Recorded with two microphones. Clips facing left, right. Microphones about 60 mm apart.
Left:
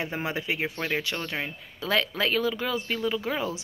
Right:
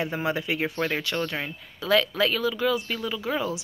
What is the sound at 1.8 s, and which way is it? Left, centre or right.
Speech, left.